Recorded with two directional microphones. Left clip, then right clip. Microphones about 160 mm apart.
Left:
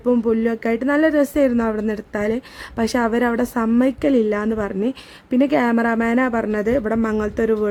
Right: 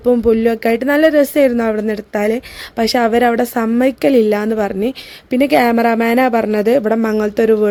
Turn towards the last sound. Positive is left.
turn(degrees=-15)  # may be behind; listen again after turning